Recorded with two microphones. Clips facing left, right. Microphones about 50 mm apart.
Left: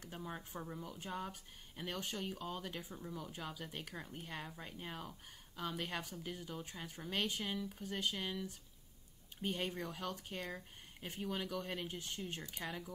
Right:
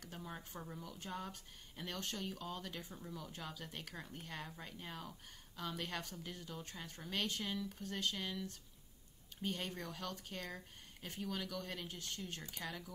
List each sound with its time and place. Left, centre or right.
0.2 s speech: centre